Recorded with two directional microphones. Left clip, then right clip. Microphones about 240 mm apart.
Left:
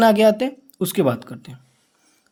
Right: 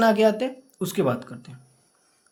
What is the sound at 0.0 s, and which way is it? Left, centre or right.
Speech, left.